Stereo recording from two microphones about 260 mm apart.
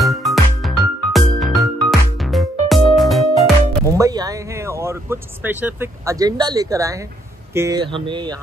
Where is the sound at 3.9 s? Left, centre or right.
Centre.